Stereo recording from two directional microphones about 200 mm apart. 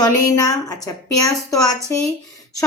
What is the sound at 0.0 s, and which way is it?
A woman's voice, 20° left (ahead or behind).